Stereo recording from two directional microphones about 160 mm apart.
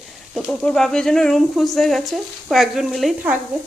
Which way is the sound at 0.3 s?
Centre (ahead or behind).